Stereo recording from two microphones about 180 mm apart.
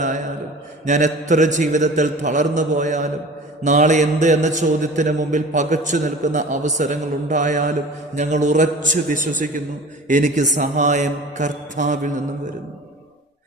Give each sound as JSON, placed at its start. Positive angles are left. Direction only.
{"t": 0.9, "sound": "mantra", "side_deg": -40}
{"t": 10.1, "sound": "a man's voice", "side_deg": -45}